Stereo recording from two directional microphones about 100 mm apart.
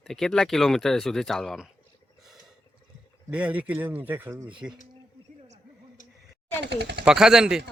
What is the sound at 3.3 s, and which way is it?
Speech, 15° right (ahead or behind).